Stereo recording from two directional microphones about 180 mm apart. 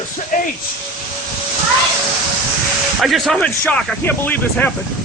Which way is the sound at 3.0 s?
Centre (ahead or behind).